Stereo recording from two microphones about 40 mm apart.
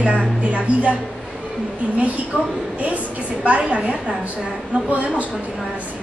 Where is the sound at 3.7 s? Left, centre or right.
Right.